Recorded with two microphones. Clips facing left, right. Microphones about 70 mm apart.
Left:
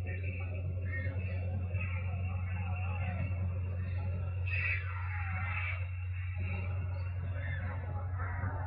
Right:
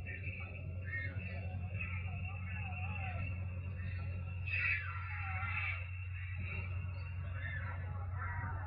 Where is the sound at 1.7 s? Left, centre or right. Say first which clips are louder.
Left 4 dB; left.